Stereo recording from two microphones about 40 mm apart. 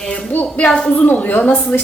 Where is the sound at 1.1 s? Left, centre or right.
Left.